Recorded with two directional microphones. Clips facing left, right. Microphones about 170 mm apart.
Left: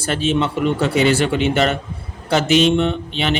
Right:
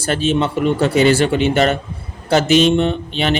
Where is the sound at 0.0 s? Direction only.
40° right (ahead or behind).